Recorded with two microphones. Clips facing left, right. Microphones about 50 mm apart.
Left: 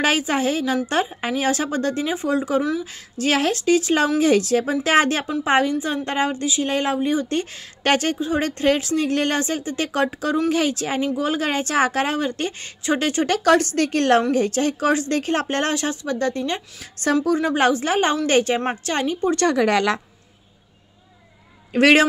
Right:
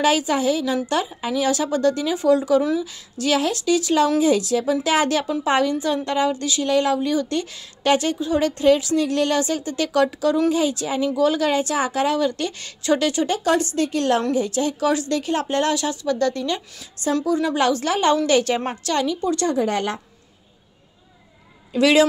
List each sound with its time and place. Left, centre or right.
0.0 s a woman's voice: left
6.3 s a woman's voice: left
7.8 s a woman's voice: left
8.2 s speech: left
10.5 s a woman's voice: left
13.3 s a woman's voice: left
19.4 s a woman's voice: left
21.7 s a woman's voice: left